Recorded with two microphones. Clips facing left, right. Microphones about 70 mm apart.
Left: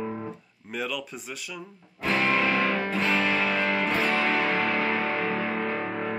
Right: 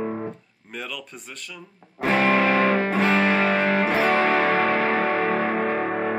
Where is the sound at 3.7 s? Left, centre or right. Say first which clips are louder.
Right 5 dB; right.